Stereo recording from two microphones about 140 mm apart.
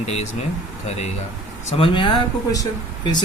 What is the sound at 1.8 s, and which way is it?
Speech, 35° left (ahead or behind).